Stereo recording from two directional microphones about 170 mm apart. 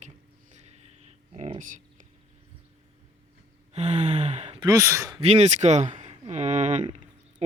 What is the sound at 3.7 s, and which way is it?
Sigh, 40° right (ahead or behind).